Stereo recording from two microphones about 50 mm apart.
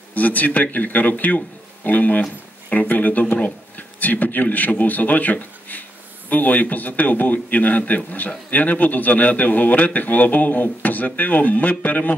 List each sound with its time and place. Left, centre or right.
0.1 s a man's voice: left